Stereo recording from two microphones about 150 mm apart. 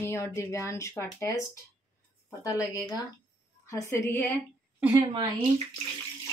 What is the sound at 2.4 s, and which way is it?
A woman's voice, 25° left (ahead or behind).